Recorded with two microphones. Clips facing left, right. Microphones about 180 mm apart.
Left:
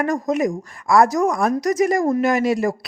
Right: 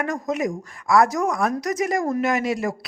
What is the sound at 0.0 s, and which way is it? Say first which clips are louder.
A woman's voice: left 5 dB; 35° left (ahead or behind).